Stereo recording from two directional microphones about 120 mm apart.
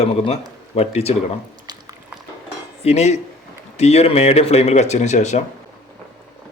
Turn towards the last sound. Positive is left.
turn(degrees=75)  # may be behind; listen again after turning